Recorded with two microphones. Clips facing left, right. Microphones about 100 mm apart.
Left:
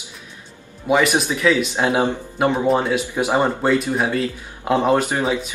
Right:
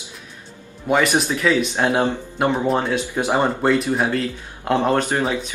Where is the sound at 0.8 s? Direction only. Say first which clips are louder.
Left 1 dB; centre (ahead or behind).